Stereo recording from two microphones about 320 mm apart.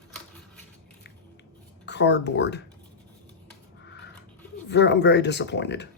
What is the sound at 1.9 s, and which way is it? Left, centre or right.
Speech, left.